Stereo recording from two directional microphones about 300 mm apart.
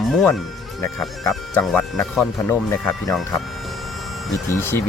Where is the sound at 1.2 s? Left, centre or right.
Centre.